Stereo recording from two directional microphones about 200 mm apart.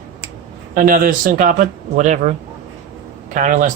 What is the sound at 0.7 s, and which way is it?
Speech, 45° right (ahead or behind).